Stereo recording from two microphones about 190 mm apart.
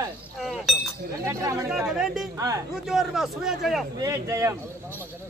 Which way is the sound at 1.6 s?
5° right (ahead or behind).